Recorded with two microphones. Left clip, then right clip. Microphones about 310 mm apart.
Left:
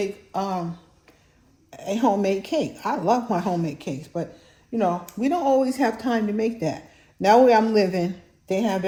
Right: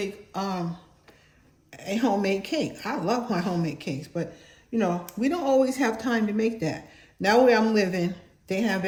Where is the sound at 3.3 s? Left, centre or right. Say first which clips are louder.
Left 4 dB; centre.